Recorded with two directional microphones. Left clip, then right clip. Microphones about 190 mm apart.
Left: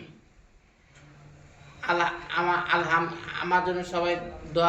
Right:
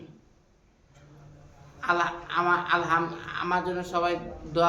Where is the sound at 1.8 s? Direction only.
20° right (ahead or behind).